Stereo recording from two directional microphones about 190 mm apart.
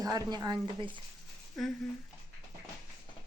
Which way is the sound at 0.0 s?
20° right (ahead or behind).